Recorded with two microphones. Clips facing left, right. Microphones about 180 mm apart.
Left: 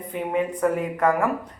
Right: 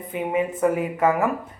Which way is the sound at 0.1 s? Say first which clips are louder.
Right 1 dB; 5° right (ahead or behind).